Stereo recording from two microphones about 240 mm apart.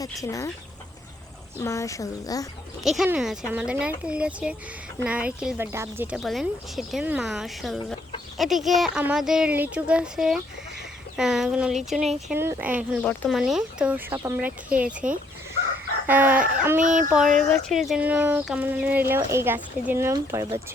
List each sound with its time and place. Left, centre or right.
0.2 s speech: centre
1.6 s speech: centre
2.8 s speech: centre
16.0 s speech: centre
16.8 s speech: right
17.1 s speech: centre